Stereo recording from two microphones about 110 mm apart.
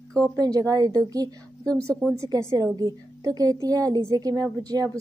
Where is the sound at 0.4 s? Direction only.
35° right (ahead or behind).